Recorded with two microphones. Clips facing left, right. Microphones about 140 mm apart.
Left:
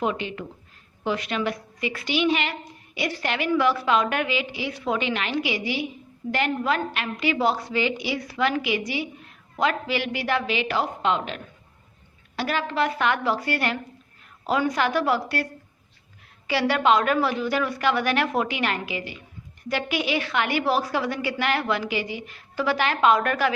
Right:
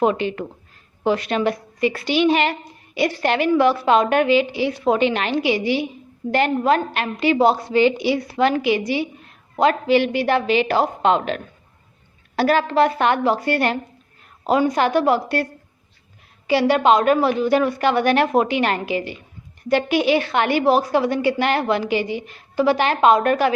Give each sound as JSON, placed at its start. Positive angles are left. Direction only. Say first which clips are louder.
{"t": 0.0, "sound": "a woman's voice", "louder": "right 8 dB", "side_deg": -45}
{"t": 16.5, "sound": "a woman's voice", "louder": "right 5 dB", "side_deg": -20}